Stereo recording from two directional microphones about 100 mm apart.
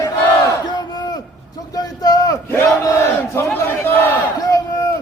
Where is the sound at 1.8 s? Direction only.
40° left (ahead or behind).